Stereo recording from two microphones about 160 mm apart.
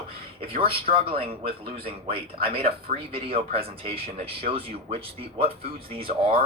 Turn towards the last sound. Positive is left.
turn(degrees=-35)  # may be behind; listen again after turning